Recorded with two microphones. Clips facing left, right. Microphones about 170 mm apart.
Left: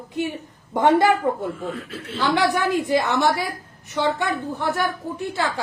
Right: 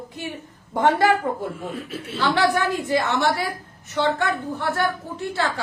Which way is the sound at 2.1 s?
15° left (ahead or behind).